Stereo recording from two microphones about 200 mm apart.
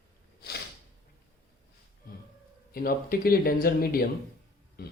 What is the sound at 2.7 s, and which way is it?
Speech, 45° left (ahead or behind).